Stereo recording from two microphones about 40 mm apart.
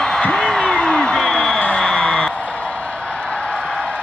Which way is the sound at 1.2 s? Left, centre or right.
Centre.